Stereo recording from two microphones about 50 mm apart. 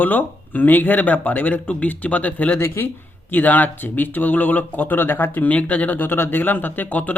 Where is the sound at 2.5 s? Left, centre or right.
Left.